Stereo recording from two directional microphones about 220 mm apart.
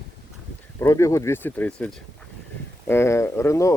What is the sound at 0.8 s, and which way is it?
Speech, 15° left (ahead or behind).